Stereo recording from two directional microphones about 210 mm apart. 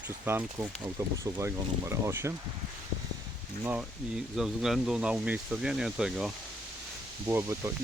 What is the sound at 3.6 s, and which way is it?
Speech, 5° right (ahead or behind).